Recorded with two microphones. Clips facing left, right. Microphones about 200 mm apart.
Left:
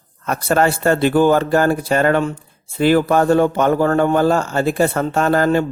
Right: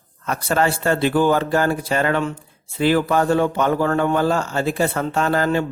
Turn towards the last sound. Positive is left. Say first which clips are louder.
# left 4 dB
turn(degrees=50)  # may be behind; listen again after turning